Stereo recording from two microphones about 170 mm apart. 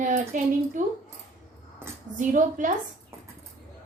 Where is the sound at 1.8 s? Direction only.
15° right (ahead or behind).